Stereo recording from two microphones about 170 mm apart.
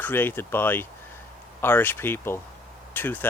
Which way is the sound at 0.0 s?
10° left (ahead or behind).